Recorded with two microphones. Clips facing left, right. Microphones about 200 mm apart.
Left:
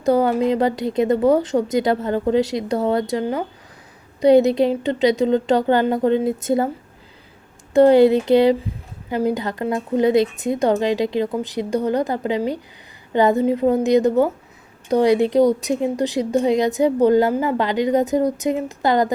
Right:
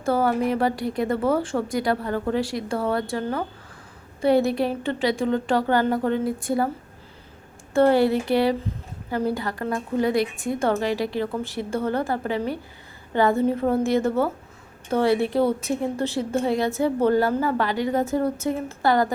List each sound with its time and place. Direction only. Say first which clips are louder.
0.0 s a woman's voice: left 5 dB; 20° left (ahead or behind)
7.7 s a woman's voice: left 6 dB; 20° left (ahead or behind)